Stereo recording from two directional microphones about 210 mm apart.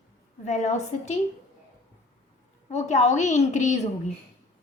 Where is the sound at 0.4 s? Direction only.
35° left (ahead or behind).